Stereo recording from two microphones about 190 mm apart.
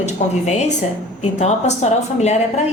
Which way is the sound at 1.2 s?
35° left (ahead or behind).